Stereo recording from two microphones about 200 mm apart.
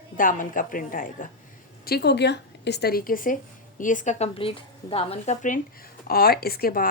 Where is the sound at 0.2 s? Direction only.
40° left (ahead or behind).